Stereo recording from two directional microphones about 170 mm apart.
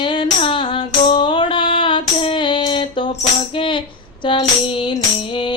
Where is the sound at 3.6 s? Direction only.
30° left (ahead or behind).